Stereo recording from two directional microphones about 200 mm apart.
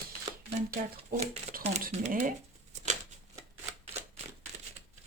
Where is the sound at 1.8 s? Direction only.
40° right (ahead or behind).